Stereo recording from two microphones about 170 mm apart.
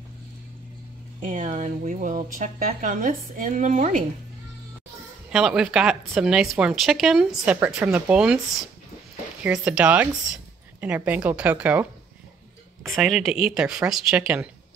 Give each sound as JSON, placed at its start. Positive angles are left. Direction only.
{"t": 1.2, "sound": "speech", "side_deg": -50}
{"t": 5.3, "sound": "speech", "side_deg": 0}